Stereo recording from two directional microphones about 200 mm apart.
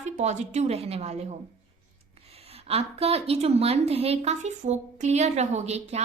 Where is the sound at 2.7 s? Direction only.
30° right (ahead or behind).